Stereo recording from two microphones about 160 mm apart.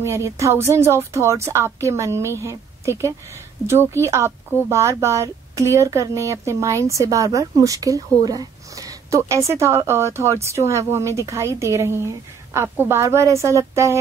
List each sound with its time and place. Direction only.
0.0 s speech: 15° right (ahead or behind)